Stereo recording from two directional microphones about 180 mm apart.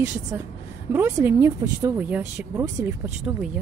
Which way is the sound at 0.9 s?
15° right (ahead or behind).